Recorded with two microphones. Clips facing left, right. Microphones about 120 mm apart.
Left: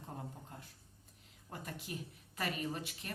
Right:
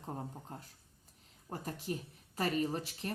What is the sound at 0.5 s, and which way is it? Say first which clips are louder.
Speech: right 4 dB; 40° right (ahead or behind).